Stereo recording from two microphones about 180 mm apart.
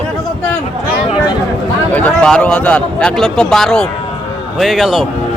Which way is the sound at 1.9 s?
5° left (ahead or behind).